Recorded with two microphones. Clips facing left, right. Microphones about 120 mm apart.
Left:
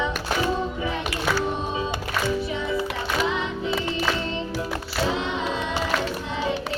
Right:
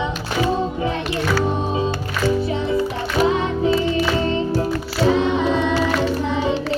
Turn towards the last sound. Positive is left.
turn(degrees=-65)  # may be behind; listen again after turning